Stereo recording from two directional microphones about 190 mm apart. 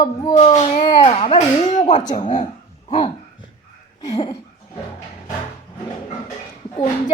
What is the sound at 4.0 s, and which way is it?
Speech, 20° left (ahead or behind).